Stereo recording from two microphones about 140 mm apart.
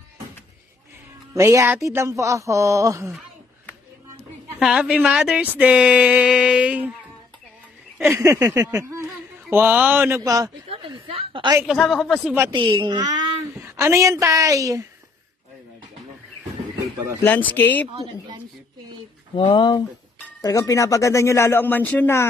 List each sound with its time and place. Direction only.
1.3 s speech: 20° right (ahead or behind)
4.6 s speech: 5° right (ahead or behind)
8.1 s speech: 20° right (ahead or behind)
10.7 s a woman's voice: 40° right (ahead or behind)
11.6 s speech: centre (ahead or behind)
12.4 s a woman's voice: 35° right (ahead or behind)
13.6 s speech: 20° right (ahead or behind)
17.2 s speech: 10° left (ahead or behind)
19.3 s speech: 35° left (ahead or behind)
20.4 s speech: 25° left (ahead or behind)